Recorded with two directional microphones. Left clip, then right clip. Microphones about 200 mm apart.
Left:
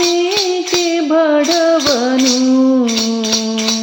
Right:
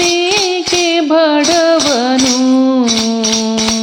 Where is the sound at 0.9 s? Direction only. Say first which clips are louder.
Right 2 dB; 30° right (ahead or behind).